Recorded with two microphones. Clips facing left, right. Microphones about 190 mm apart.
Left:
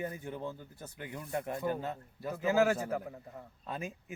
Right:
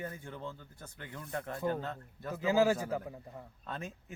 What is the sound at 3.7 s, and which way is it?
Speech, 15° left (ahead or behind).